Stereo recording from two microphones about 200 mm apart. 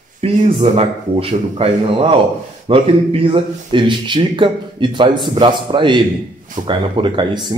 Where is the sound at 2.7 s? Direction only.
25° right (ahead or behind).